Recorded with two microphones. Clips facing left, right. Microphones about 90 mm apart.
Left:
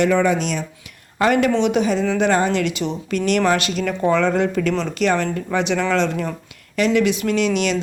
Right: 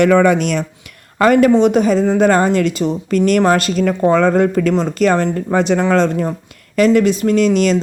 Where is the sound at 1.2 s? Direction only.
45° right (ahead or behind).